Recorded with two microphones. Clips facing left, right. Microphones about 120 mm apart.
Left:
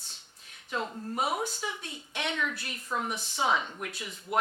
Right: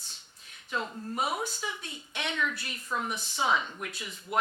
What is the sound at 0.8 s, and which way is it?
Speech, 25° left (ahead or behind).